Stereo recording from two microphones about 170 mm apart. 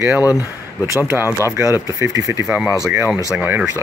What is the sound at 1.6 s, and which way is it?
Speech, 15° right (ahead or behind).